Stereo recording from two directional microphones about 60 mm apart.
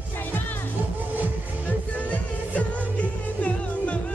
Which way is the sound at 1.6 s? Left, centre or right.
Left.